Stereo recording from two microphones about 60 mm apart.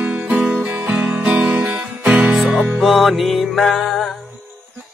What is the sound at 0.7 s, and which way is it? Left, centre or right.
Music, right.